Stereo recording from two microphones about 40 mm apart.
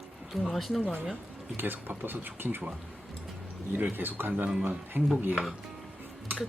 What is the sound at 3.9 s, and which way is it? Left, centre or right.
Speech, right.